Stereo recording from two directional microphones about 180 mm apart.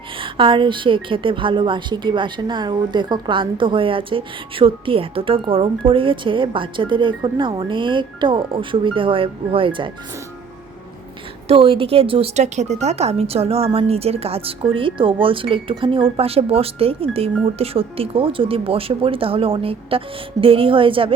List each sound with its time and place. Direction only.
0.2 s a woman's voice: 30° right (ahead or behind)
11.4 s a woman's voice: 30° right (ahead or behind)